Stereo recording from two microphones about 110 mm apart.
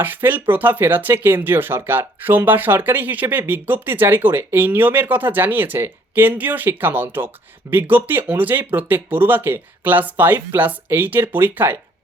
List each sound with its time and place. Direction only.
0.0 s speech: 20° right (ahead or behind)